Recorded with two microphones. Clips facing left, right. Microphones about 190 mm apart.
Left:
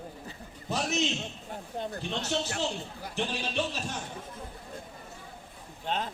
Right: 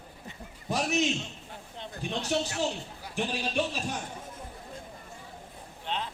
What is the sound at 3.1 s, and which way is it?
Speech, 10° right (ahead or behind).